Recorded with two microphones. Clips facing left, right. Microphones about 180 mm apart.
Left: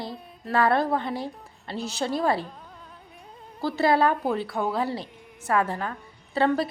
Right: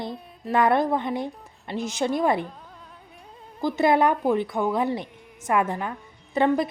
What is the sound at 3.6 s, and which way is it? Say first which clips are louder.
A woman's voice: right 2 dB; 20° right (ahead or behind).